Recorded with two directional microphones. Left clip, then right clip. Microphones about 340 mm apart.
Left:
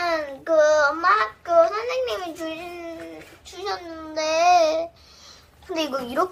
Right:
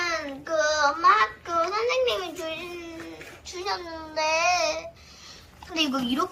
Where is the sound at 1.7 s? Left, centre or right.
Centre.